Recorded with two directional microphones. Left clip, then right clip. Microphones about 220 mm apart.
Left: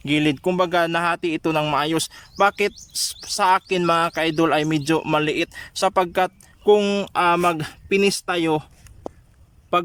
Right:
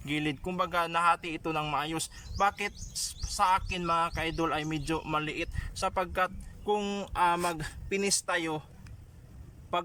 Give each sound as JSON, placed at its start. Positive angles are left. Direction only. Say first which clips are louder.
{"t": 0.0, "sound": "speech", "louder": "left 13 dB", "side_deg": 50}